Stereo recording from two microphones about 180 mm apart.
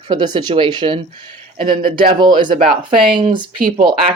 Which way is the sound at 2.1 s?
25° right (ahead or behind).